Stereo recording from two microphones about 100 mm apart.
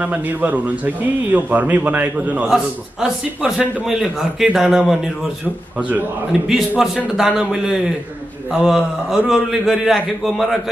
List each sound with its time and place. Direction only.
0.0 s a man's voice: 15° right (ahead or behind); by 10.5 s centre (ahead or behind)